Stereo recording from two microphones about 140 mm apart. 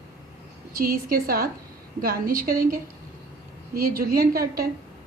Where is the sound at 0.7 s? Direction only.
90° right.